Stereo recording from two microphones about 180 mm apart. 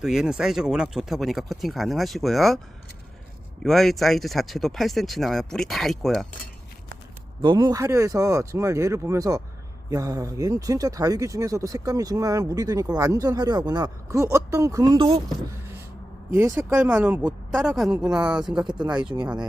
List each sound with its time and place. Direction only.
0.0 s speech: centre (ahead or behind)
3.6 s speech: centre (ahead or behind)
7.4 s speech: 25° right (ahead or behind)
16.6 s speech: 10° right (ahead or behind)
18.6 s speech: 25° right (ahead or behind)
18.9 s speech: 5° right (ahead or behind)